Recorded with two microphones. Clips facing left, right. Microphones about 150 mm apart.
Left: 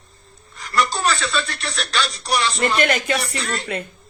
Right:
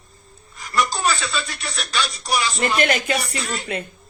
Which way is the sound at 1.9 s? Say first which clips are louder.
Left 1 dB; centre (ahead or behind).